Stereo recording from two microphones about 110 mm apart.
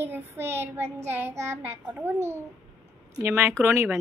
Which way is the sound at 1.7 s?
15° right (ahead or behind).